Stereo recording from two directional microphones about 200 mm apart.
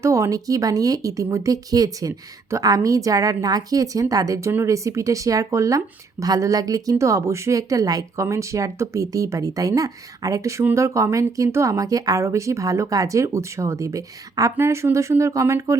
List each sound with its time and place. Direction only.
0.0 s speech: 15° right (ahead or behind)